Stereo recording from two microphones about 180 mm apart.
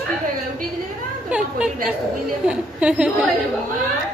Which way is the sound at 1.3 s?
5° right (ahead or behind).